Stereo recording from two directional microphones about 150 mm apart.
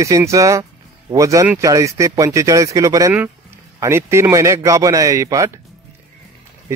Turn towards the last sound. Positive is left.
turn(degrees=-20)  # may be behind; listen again after turning